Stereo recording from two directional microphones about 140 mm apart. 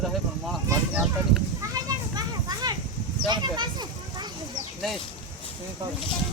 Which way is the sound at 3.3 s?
30° right (ahead or behind).